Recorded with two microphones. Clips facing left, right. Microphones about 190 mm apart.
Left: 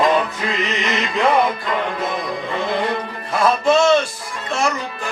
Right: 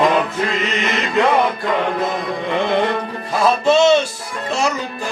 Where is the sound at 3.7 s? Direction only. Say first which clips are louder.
Right 2 dB; 25° right (ahead or behind).